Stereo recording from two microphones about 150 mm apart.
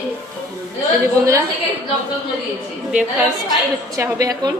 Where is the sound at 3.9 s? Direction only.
20° right (ahead or behind).